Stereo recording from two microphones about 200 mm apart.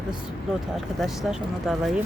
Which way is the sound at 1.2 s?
Centre (ahead or behind).